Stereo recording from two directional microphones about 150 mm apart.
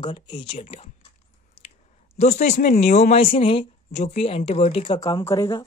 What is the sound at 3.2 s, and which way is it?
Speech, 35° left (ahead or behind).